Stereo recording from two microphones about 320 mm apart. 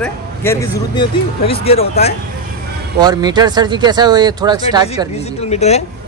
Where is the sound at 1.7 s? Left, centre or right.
Left.